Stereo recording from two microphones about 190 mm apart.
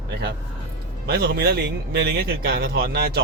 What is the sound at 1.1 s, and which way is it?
A man's voice, 55° right (ahead or behind).